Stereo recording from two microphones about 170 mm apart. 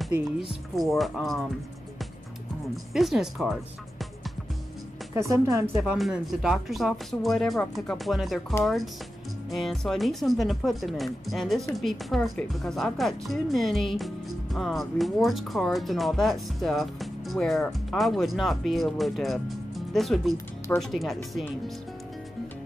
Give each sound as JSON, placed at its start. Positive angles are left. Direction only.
{"t": 0.7, "sound": "a woman's voice", "side_deg": 0}
{"t": 2.7, "sound": "a woman's voice", "side_deg": 0}
{"t": 5.1, "sound": "speech", "side_deg": -15}
{"t": 5.8, "sound": "a woman's voice", "side_deg": 0}